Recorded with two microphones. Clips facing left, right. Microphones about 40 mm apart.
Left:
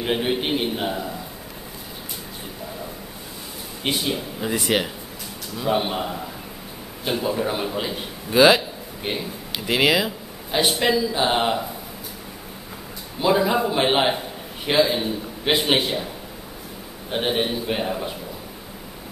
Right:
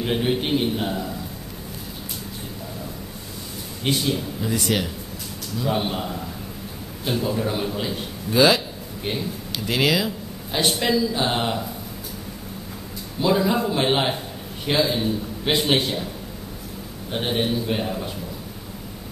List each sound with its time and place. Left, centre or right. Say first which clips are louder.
0.0 s a man's voice: even; centre
3.8 s a man's voice: right 1 dB; centre
4.4 s a man's voice: left 5 dB; left
13.2 s a man's voice: left 1 dB; centre
17.1 s a man's voice: left 1 dB; centre